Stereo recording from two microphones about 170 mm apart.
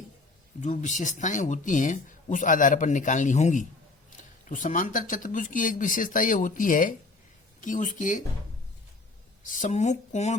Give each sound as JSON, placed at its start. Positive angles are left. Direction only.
{"t": 0.6, "sound": "speech", "side_deg": 45}
{"t": 9.4, "sound": "speech", "side_deg": 50}